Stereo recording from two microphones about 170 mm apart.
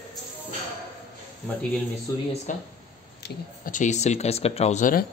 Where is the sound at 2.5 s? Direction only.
50° left (ahead or behind).